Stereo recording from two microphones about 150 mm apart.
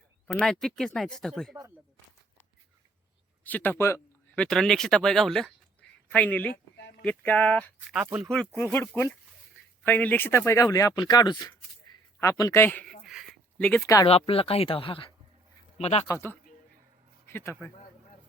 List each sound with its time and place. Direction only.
0.3 s speech: centre (ahead or behind)
3.4 s speech: 10° left (ahead or behind)
4.4 s speech: 5° left (ahead or behind)
8.5 s speech: 15° left (ahead or behind)
13.1 s a sound: centre (ahead or behind)
13.6 s speech: 10° left (ahead or behind)
14.1 s speech: 40° left (ahead or behind)
16.0 s speech: 15° left (ahead or behind)